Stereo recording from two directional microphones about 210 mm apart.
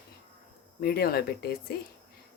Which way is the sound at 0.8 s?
45° left (ahead or behind).